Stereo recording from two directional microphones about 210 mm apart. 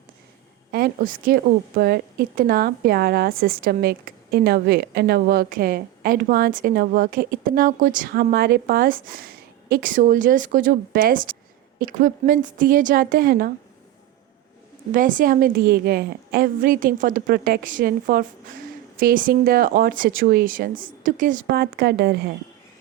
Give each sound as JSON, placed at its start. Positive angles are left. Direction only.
{"t": 0.7, "sound": "a woman's voice", "side_deg": -45}
{"t": 14.9, "sound": "a woman's voice", "side_deg": -40}